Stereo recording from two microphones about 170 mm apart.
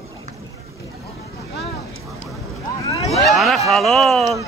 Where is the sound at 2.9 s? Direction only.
35° left (ahead or behind).